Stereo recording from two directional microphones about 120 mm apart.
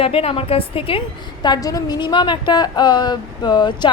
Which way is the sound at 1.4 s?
35° left (ahead or behind).